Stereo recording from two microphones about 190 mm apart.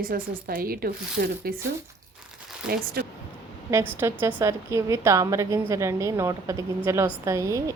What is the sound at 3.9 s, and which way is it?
A woman's voice, 10° right (ahead or behind).